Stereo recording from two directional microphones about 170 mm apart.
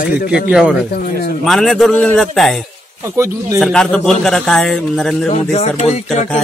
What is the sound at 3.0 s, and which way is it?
Speech, 15° right (ahead or behind).